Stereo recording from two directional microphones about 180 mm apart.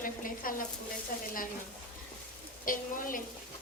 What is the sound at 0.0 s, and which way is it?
Speech, 50° left (ahead or behind).